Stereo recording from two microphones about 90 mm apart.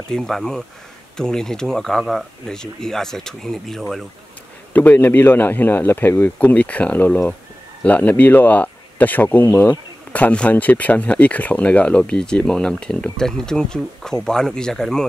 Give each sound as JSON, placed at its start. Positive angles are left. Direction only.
{"t": 0.1, "sound": "speech", "side_deg": 5}
{"t": 4.7, "sound": "speech", "side_deg": 20}